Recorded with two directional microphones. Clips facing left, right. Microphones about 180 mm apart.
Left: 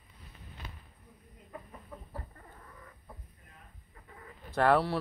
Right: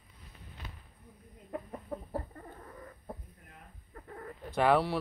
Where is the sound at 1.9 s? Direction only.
40° right (ahead or behind).